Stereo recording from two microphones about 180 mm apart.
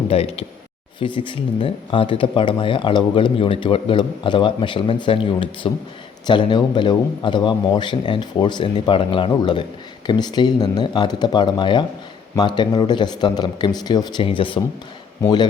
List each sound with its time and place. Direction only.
0.1 s speech: 35° left (ahead or behind)